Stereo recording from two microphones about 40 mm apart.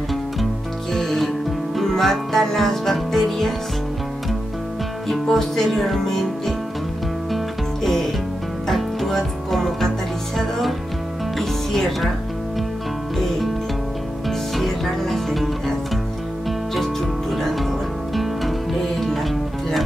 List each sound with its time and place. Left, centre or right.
0.9 s music: centre
5.0 s music: centre
7.3 s music: centre
11.3 s music: centre
14.5 s music: centre
16.8 s music: centre